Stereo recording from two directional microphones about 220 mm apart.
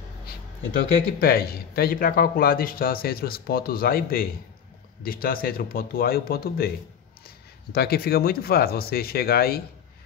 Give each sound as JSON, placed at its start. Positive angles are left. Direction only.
{"t": 0.7, "sound": "a man's voice", "side_deg": 45}
{"t": 7.7, "sound": "a man's voice", "side_deg": 45}